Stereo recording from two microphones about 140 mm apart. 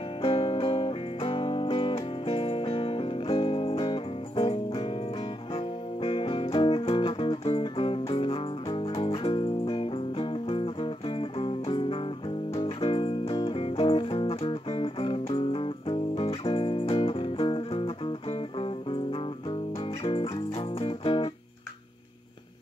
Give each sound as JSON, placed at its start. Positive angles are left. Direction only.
{"t": 0.2, "sound": "music", "side_deg": 40}